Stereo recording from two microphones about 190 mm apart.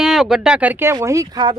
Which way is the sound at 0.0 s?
Centre (ahead or behind).